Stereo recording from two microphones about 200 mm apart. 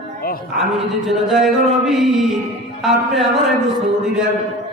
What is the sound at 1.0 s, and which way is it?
Mantra, centre (ahead or behind).